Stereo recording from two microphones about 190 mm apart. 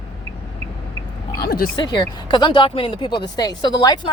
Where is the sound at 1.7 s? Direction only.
25° left (ahead or behind).